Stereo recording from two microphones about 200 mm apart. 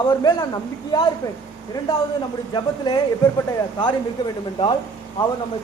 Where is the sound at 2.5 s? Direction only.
20° left (ahead or behind).